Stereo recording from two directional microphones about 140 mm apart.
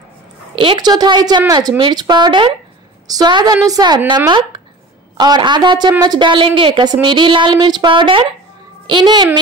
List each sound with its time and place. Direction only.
0.6 s a woman's voice: 35° right (ahead or behind)